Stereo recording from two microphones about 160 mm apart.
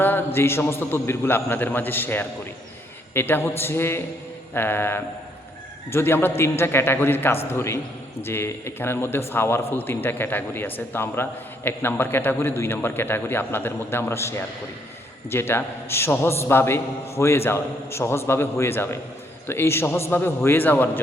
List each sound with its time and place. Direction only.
0.3 s a man's voice: 15° left (ahead or behind)